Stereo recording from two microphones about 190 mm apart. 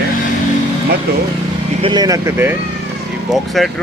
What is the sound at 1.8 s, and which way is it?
Speech, 25° right (ahead or behind).